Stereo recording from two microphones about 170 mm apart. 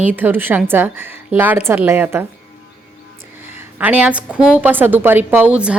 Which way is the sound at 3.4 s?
15° right (ahead or behind).